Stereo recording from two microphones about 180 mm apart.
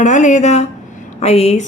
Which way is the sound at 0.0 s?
40° left (ahead or behind).